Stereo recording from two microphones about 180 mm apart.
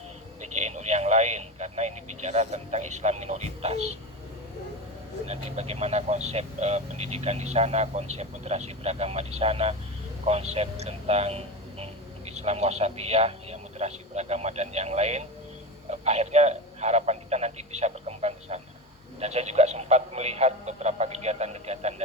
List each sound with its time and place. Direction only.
0.5 s a man's voice: 40° right (ahead or behind)
5.2 s speech: 35° right (ahead or behind)